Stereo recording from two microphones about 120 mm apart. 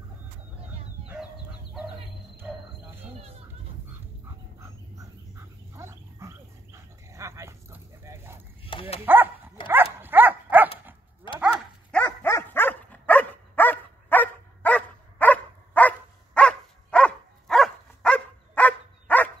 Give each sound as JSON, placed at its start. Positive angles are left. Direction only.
{"t": 2.3, "sound": "cricket", "side_deg": -15}
{"t": 3.0, "sound": "a sound", "side_deg": -55}
{"t": 4.6, "sound": "dog", "side_deg": -25}
{"t": 11.3, "sound": "dog", "side_deg": 40}
{"t": 11.9, "sound": "dog", "side_deg": 10}